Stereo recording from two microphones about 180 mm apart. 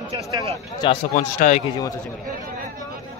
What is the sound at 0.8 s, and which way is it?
Speech, 25° left (ahead or behind).